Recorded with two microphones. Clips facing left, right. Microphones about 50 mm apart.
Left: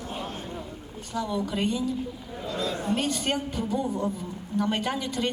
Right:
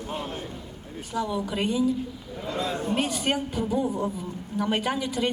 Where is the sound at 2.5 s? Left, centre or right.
Right.